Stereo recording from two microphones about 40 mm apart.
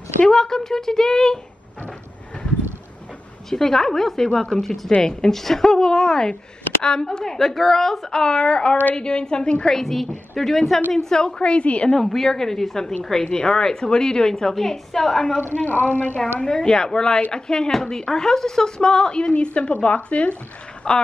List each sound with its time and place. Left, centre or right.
0.3 s a woman's voice: centre
3.4 s a woman's voice: centre
9.8 s a woman's voice: centre; by 12.0 s left
12.0 s a woman's voice: centre
13.2 s a woman's voice: left
15.5 s speech: left
16.4 s speech: centre
19.3 s speech: left
20.9 s speech: centre